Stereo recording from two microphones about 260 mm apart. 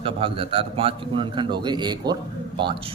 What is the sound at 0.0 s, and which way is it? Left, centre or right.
Speech, right.